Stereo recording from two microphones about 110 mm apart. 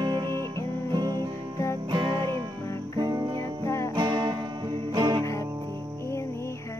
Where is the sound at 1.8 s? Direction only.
45° right (ahead or behind).